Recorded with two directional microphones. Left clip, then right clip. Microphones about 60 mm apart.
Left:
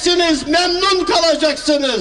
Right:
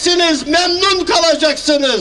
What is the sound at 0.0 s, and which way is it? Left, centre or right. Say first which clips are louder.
A man's voice: right 2 dB; centre.